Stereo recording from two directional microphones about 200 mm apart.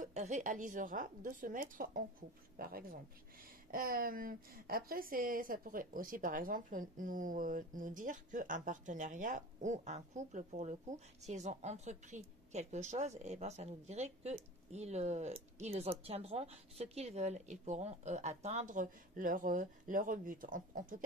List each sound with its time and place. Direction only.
0.0 s a woman's voice: 35° right (ahead or behind)